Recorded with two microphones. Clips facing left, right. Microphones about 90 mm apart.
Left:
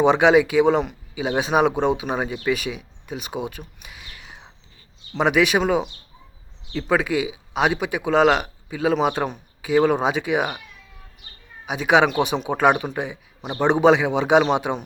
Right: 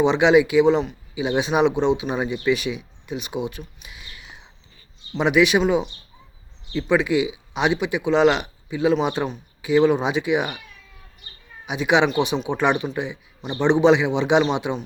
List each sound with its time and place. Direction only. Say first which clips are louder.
0.0 s speech: even; 45° left (ahead or behind)
1.2 s speech: even; 40° left (ahead or behind)
3.6 s whispering: right 1 dB; 50° left (ahead or behind)
5.1 s speech: right 1 dB; 45° left (ahead or behind)
11.6 s speech: left 1 dB; 40° left (ahead or behind)
12.0 s a man's voice: even; 60° left (ahead or behind)
12.3 s speech: left 2 dB; 45° left (ahead or behind)